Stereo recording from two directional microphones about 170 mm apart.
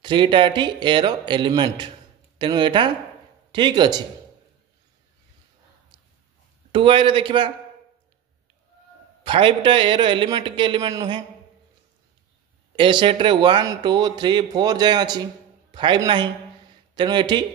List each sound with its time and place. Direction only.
0.0 s speech: 25° right (ahead or behind)
6.7 s speech: 30° right (ahead or behind)
9.2 s speech: 30° right (ahead or behind)
12.7 s speech: 30° right (ahead or behind)